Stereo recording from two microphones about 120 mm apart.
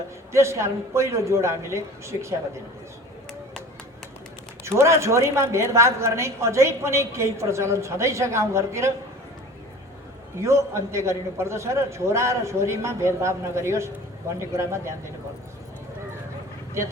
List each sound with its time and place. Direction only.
0.3 s a woman's voice: 25° right (ahead or behind)
4.6 s a woman's voice: 25° right (ahead or behind)
10.4 s a woman's voice: 25° right (ahead or behind)